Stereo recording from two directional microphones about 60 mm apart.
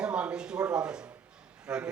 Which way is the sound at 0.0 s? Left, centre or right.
Centre.